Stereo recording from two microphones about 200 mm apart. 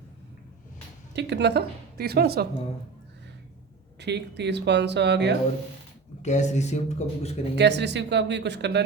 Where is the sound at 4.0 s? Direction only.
60° right (ahead or behind).